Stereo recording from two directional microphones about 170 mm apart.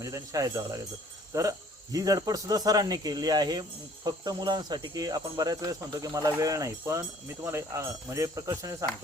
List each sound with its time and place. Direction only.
0.0 s speech: 20° right (ahead or behind)